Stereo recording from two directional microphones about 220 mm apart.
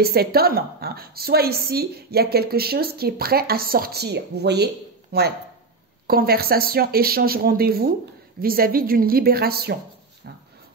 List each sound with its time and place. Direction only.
0.0 s a woman's voice: 45° right (ahead or behind)